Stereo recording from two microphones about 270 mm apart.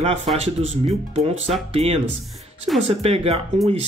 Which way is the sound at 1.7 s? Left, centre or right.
Right.